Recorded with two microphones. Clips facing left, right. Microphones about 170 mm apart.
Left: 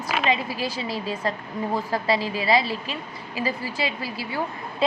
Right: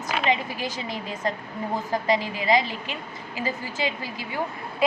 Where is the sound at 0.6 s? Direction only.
30° left (ahead or behind).